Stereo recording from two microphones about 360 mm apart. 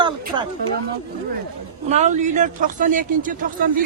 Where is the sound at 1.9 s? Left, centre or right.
Centre.